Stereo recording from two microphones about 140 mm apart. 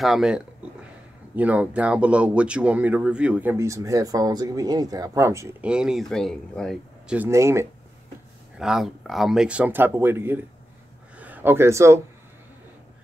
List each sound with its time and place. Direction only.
0.0 s speech: 5° right (ahead or behind); by 5.5 s 20° right (ahead or behind)
5.6 s speech: 5° right (ahead or behind)
7.2 s speech: 20° right (ahead or behind)
8.5 s speech: 5° right (ahead or behind); by 12.0 s 20° right (ahead or behind)